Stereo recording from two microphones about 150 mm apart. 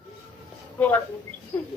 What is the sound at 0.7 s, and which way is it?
Speech, 10° left (ahead or behind).